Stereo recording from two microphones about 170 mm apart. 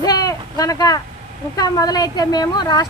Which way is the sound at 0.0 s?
20° left (ahead or behind).